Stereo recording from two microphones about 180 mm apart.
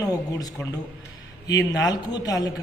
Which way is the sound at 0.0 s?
20° left (ahead or behind).